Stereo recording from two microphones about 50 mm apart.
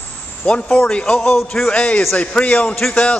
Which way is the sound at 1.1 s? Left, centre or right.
Centre.